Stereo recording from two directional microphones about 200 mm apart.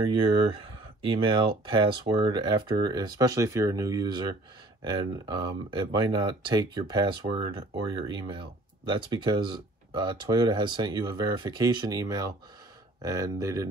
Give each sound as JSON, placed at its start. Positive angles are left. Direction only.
{"t": 0.1, "sound": "speech", "side_deg": -25}